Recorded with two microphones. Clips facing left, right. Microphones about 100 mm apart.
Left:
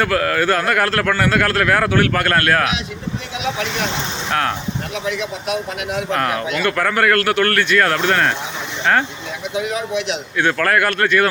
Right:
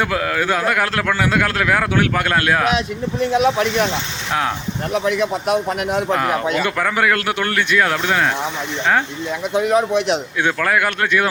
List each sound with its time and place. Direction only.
0.0 s a man's voice: 10° right (ahead or behind)
3.3 s speech: 45° right (ahead or behind)
4.3 s a man's voice: 10° right (ahead or behind)
5.0 s speech: 50° right (ahead or behind)
6.6 s a man's voice: 10° right (ahead or behind)
9.6 s speech: 50° right (ahead or behind)
10.3 s a man's voice: 10° right (ahead or behind)